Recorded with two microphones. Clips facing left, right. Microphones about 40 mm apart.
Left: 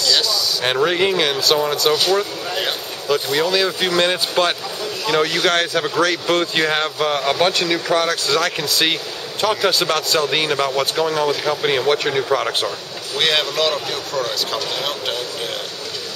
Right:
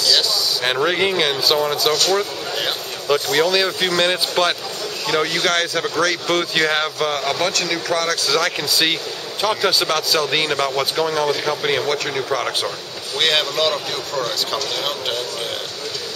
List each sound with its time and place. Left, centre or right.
0.1 s a man's voice: centre
2.1 s a sound: centre
3.1 s speech: centre
3.4 s a man's voice: centre